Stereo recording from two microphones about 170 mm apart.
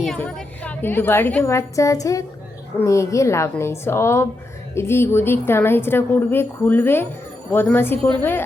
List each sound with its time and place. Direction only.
0.1 s a woman's voice: 5° left (ahead or behind)